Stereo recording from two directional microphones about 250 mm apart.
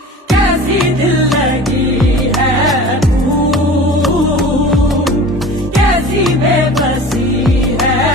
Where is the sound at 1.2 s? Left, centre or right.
Centre.